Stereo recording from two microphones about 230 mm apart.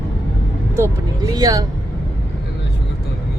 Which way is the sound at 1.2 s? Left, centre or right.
Centre.